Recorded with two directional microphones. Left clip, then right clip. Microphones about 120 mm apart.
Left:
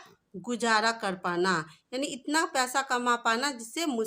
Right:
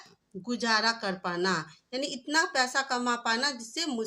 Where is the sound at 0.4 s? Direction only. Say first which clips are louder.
Left 1 dB; 40° left (ahead or behind).